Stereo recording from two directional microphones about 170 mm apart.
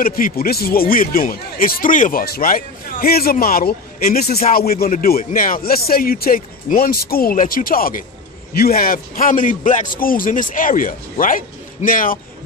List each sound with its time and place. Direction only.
0.0 s a man's voice: 60° left (ahead or behind)